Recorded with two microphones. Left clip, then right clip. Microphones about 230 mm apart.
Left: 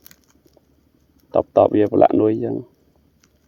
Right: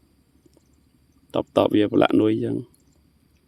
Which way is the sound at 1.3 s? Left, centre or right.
Right.